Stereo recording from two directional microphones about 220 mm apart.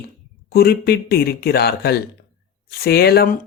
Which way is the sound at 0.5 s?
45° left (ahead or behind).